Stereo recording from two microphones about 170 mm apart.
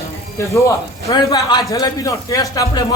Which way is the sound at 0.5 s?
20° left (ahead or behind).